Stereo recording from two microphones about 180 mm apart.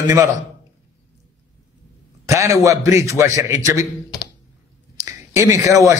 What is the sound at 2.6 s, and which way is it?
A man's voice, 15° right (ahead or behind).